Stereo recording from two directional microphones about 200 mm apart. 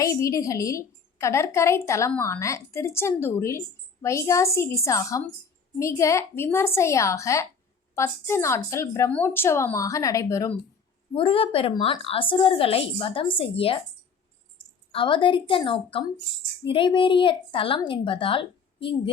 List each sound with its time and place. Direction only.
0.0 s a woman's voice: 15° left (ahead or behind)
11.1 s a woman's voice: 25° left (ahead or behind)
14.9 s a woman's voice: 25° left (ahead or behind)